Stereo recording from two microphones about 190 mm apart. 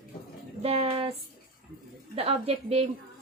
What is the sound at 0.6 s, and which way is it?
Speech, 30° right (ahead or behind).